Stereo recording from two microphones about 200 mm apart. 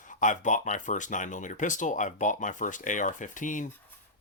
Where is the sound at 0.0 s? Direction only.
40° left (ahead or behind).